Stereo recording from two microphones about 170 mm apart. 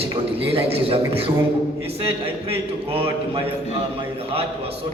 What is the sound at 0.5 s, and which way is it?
A man's voice, 35° right (ahead or behind).